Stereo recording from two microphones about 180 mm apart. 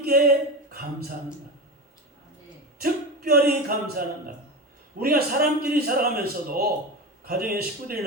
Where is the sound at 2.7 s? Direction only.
60° right (ahead or behind).